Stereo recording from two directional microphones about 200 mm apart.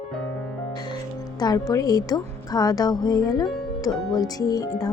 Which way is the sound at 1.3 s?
20° left (ahead or behind).